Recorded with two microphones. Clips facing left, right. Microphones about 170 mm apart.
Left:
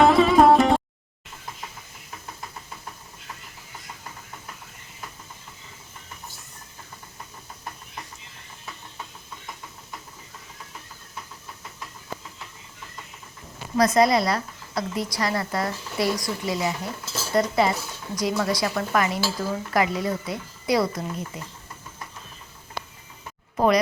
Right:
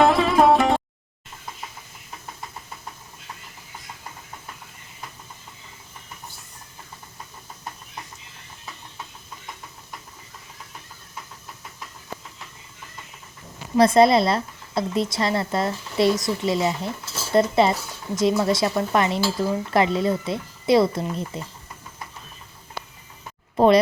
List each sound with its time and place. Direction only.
0.0 s music: centre (ahead or behind)
13.7 s speech: 30° right (ahead or behind)
23.6 s speech: 25° right (ahead or behind)